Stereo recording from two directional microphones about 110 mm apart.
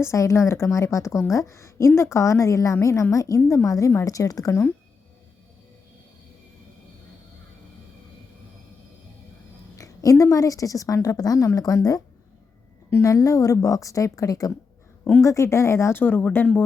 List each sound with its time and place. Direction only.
0.0 s a woman's voice: 25° left (ahead or behind)
9.7 s a woman's voice: 30° left (ahead or behind)